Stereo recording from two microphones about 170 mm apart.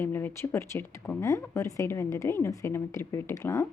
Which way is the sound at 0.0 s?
10° left (ahead or behind).